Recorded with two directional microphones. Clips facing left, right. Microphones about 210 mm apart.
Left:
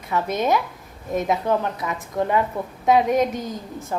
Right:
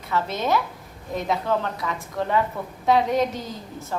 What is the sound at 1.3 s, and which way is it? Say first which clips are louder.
A woman's voice: left 1 dB; 20° left (ahead or behind).